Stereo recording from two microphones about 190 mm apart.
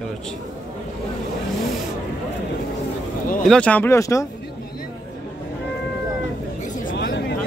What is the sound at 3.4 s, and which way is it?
Speech, 5° left (ahead or behind).